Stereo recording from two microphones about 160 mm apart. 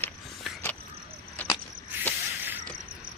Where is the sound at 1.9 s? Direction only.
10° right (ahead or behind).